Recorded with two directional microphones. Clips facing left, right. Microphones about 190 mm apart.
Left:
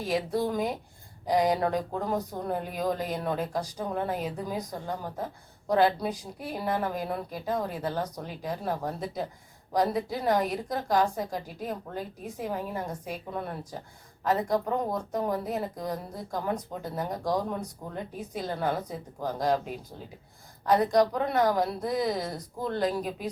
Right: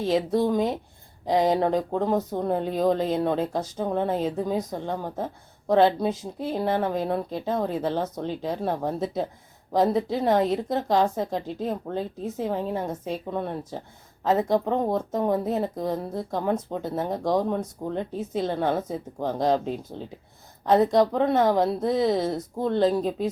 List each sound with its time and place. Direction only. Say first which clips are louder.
0.3 s a woman's voice: right 5 dB; 20° right (ahead or behind)